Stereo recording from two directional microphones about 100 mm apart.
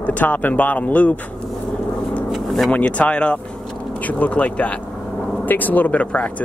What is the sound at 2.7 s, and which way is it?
Speech, 15° left (ahead or behind).